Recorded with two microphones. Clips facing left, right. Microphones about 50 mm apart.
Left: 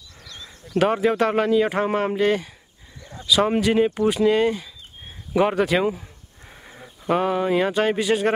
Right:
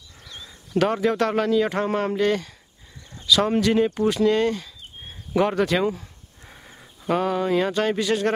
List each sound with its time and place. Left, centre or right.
0.7 s speech: centre